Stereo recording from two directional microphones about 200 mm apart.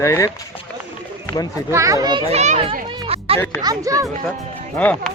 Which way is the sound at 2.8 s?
25° right (ahead or behind).